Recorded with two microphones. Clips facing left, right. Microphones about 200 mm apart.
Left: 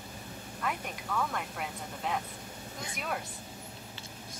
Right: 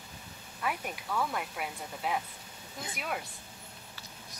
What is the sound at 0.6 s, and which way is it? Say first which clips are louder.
Speech: right 1 dB; 10° right (ahead or behind).